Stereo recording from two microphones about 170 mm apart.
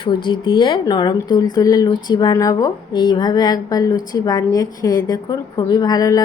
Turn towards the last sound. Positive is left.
turn(degrees=20)  # may be behind; listen again after turning